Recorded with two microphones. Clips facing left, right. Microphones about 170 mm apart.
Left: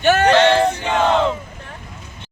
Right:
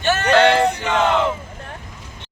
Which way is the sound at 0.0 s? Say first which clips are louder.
Left 5 dB; 50° left (ahead or behind).